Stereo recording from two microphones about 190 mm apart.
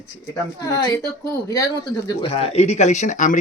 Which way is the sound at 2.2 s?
30° left (ahead or behind).